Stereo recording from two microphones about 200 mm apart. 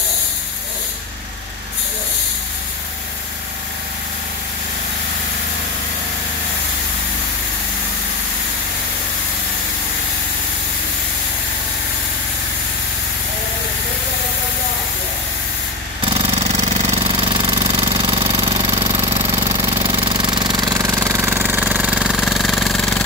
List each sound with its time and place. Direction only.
16.1 s jackhammer: 30° right (ahead or behind); by 23.0 s centre (ahead or behind)